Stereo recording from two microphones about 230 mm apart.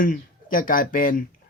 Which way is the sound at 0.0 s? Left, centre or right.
Left.